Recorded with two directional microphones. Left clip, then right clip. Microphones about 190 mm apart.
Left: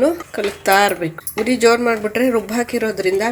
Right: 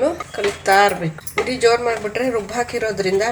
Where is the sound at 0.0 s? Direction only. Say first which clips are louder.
Left 2 dB; 55° left (ahead or behind).